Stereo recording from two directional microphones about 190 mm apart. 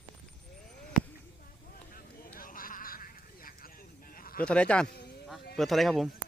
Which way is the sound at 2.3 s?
45° left (ahead or behind).